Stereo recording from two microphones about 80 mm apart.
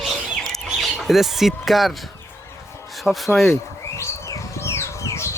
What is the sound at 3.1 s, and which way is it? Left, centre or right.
Speech, centre.